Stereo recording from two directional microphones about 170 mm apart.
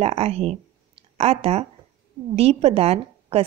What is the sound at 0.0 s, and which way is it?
Speech, 35° right (ahead or behind).